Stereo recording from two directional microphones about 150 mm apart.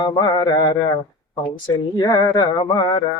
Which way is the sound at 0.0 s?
30° left (ahead or behind).